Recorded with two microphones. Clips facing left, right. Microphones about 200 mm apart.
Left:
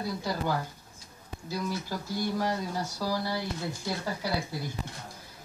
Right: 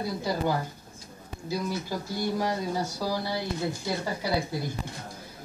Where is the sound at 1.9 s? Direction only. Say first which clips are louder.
Right 2 dB; 15° right (ahead or behind).